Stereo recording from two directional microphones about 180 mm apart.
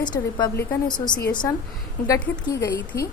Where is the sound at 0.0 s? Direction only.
25° left (ahead or behind).